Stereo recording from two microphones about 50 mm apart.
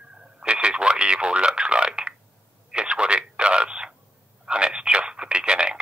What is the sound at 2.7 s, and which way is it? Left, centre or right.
Telephone, centre.